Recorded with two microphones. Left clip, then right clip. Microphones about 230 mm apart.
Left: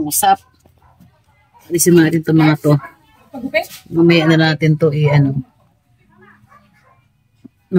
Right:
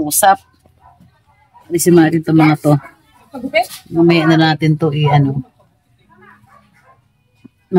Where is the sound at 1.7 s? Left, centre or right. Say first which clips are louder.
Right 1 dB; centre.